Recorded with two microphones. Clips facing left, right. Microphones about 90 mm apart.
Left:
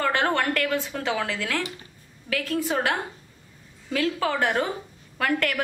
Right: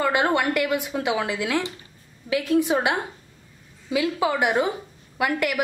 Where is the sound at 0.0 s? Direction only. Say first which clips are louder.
Right 2 dB; 10° right (ahead or behind).